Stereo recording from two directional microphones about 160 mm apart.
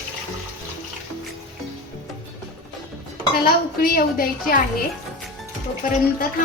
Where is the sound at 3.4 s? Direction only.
65° left (ahead or behind).